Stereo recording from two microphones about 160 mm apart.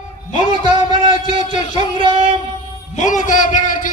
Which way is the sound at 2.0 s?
30° right (ahead or behind).